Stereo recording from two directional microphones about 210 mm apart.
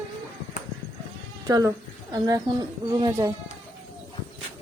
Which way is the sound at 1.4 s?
15° right (ahead or behind).